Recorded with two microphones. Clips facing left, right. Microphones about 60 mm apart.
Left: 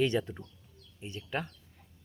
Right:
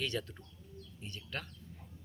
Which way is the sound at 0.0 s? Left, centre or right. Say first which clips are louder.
Left 9 dB; left.